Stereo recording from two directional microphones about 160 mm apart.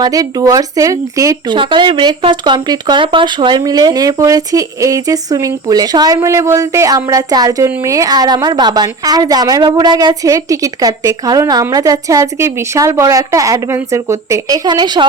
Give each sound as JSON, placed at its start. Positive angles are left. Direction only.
{"t": 0.0, "sound": "speech", "side_deg": -20}
{"t": 1.5, "sound": "speech", "side_deg": -30}